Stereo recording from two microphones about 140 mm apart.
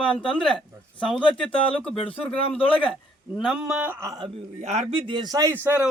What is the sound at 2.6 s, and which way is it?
Speech, 40° left (ahead or behind).